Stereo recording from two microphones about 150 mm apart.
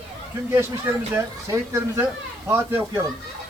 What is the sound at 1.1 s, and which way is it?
Speech, 15° right (ahead or behind).